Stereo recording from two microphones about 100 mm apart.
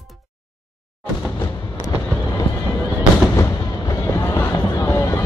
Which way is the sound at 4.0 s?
25° left (ahead or behind).